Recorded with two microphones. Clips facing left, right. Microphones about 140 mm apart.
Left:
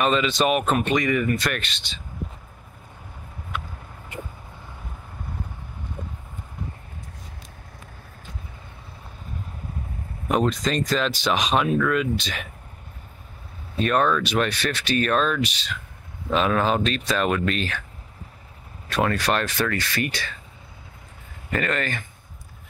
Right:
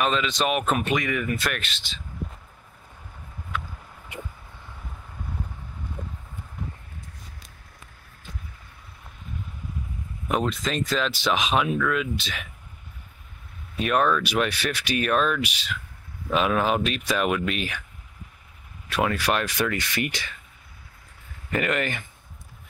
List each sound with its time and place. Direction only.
0.0 s speech: centre (ahead or behind)
10.2 s speech: centre (ahead or behind)
13.7 s speech: 5° right (ahead or behind)
18.9 s speech: 10° right (ahead or behind)
21.5 s speech: 15° right (ahead or behind)